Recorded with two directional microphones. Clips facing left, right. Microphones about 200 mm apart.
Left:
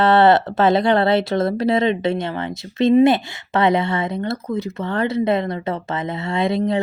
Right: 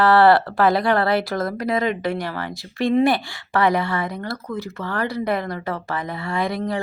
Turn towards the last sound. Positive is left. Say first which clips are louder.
# left 4 dB
turn(degrees=25)  # may be behind; listen again after turning